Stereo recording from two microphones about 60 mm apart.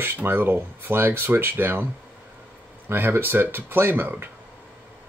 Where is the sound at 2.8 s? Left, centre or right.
Right.